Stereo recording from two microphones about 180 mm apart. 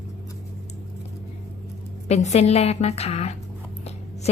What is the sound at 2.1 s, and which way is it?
A woman's voice, 40° left (ahead or behind).